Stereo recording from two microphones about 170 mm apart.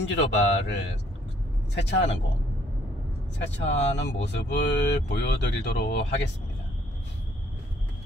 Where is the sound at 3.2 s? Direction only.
90° left.